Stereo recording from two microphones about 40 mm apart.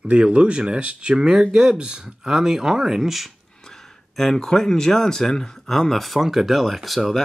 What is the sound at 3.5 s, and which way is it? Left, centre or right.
Speech, centre.